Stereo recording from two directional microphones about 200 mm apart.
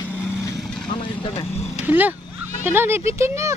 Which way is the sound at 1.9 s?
10° right (ahead or behind).